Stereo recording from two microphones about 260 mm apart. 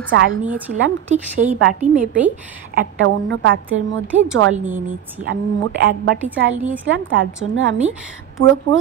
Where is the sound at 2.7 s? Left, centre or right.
Right.